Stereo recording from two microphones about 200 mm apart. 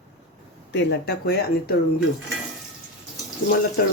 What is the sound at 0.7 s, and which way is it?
Speech, 60° left (ahead or behind).